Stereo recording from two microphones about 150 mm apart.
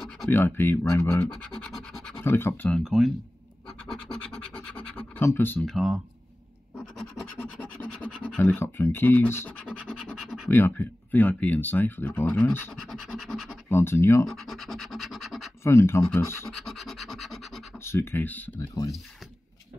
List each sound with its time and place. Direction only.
0.3 s speech: 15° left (ahead or behind)
1.6 s scratch: 5° left (ahead or behind)
2.8 s scratch: centre (ahead or behind)
5.2 s speech: 15° left (ahead or behind)
5.7 s scratch: centre (ahead or behind)
8.0 s speech: 10° left (ahead or behind)
9.8 s scratch: centre (ahead or behind)
10.5 s speech: 15° left (ahead or behind)
12.8 s scratch: centre (ahead or behind)
13.7 s speech: 15° left (ahead or behind)
14.2 s scratch: centre (ahead or behind)
15.6 s speech: 20° left (ahead or behind)
16.4 s scratch: centre (ahead or behind)
17.8 s speech: 15° left (ahead or behind)